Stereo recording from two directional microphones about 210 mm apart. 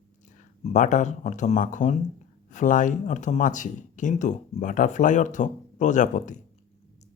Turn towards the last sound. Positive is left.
turn(degrees=35)  # may be behind; listen again after turning